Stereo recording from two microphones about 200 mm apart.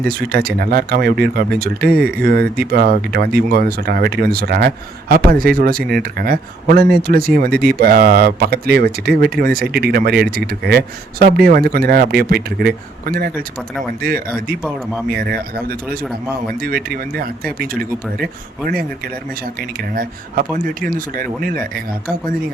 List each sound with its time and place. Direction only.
0.1 s speech: 50° right (ahead or behind)